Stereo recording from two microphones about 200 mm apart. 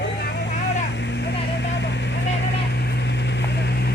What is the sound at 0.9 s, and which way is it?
Vehicle, 60° left (ahead or behind).